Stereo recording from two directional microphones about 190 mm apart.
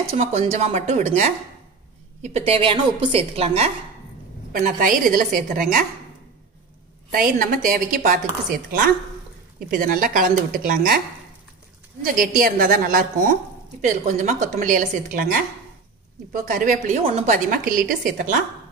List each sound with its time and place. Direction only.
0.1 s a woman's voice: 35° right (ahead or behind)
4.5 s a woman's voice: 50° right (ahead or behind)
7.1 s a woman's voice: 50° right (ahead or behind)
12.0 s a woman's voice: 50° right (ahead or behind)
16.3 s a woman's voice: 45° right (ahead or behind)